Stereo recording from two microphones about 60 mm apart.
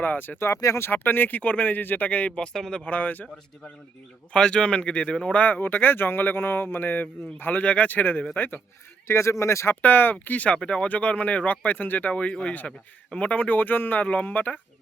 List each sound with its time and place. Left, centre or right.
0.0 s speech: left
0.4 s speech: left
0.8 s speech: left; by 2.8 s centre
2.8 s speech: left
4.3 s speech: centre; by 8.6 s left
9.0 s speech: left
9.8 s speech: left